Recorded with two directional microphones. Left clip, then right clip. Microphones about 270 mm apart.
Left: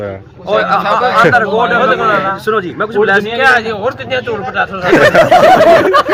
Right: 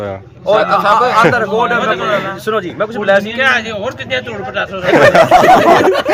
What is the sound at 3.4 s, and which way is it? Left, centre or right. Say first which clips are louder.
Speech: left 3 dB; centre.